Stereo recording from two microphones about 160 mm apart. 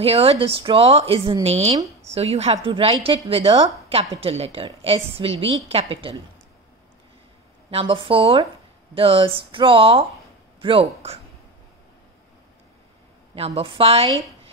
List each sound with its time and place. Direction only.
0.0 s a woman's voice: 40° right (ahead or behind)
7.7 s a woman's voice: 35° right (ahead or behind)
13.3 s a woman's voice: 35° right (ahead or behind)